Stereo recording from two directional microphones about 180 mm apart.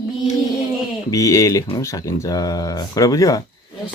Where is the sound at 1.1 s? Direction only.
20° left (ahead or behind).